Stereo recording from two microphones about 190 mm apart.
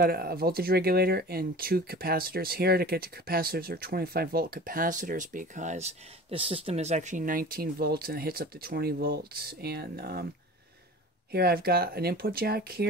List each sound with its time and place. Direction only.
0.0 s speech: 50° right (ahead or behind)
11.3 s speech: 55° right (ahead or behind)